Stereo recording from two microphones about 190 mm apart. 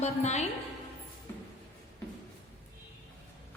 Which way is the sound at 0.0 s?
35° left (ahead or behind).